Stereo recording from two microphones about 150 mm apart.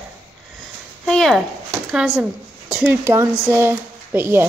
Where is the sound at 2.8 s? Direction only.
15° right (ahead or behind).